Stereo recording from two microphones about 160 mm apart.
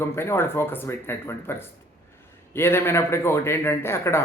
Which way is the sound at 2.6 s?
15° left (ahead or behind).